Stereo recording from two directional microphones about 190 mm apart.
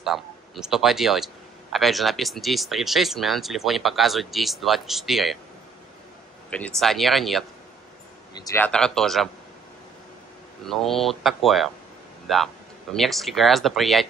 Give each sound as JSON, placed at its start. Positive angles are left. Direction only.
{"t": 0.0, "sound": "a man's voice", "side_deg": 0}
{"t": 6.5, "sound": "a man's voice", "side_deg": 5}
{"t": 8.4, "sound": "a man's voice", "side_deg": 15}
{"t": 10.6, "sound": "a man's voice", "side_deg": 0}